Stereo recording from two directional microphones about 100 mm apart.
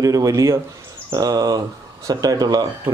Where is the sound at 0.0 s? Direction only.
35° right (ahead or behind).